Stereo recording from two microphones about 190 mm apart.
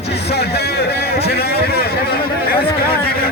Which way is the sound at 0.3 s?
60° left (ahead or behind).